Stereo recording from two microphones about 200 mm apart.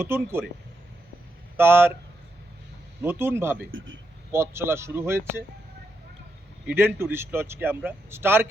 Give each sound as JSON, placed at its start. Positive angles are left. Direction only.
{"t": 0.0, "sound": "speech", "side_deg": -10}
{"t": 1.5, "sound": "speech", "side_deg": -10}
{"t": 3.0, "sound": "speech", "side_deg": -10}
{"t": 3.7, "sound": "a man's voice", "side_deg": -75}
{"t": 4.3, "sound": "speech", "side_deg": -10}
{"t": 6.7, "sound": "speech", "side_deg": -10}